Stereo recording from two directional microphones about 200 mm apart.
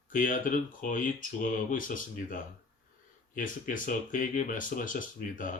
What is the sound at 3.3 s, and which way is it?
Speech, 40° left (ahead or behind).